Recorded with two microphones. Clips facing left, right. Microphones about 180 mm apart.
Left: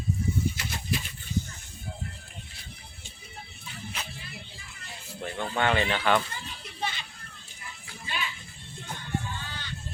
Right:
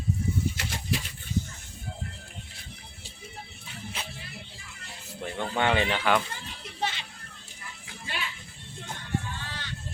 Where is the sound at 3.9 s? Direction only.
30° right (ahead or behind).